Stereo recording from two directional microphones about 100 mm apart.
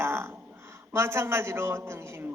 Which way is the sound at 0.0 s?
25° right (ahead or behind).